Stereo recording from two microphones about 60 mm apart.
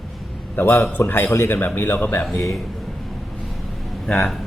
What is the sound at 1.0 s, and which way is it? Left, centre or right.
A man's voice, left.